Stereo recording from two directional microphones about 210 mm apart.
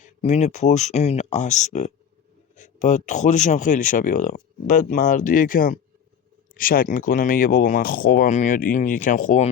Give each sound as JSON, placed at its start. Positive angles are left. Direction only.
{"t": 0.0, "sound": "speech", "side_deg": 30}